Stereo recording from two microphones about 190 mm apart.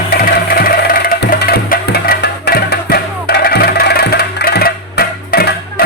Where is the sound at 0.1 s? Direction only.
55° left (ahead or behind).